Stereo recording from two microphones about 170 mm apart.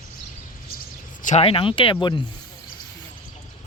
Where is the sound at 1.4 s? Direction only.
30° left (ahead or behind).